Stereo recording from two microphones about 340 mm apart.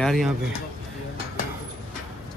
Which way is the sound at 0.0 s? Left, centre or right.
Centre.